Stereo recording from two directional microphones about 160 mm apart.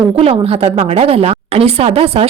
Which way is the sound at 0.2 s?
40° right (ahead or behind).